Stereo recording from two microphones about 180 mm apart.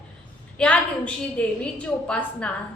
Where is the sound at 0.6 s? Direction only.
5° left (ahead or behind).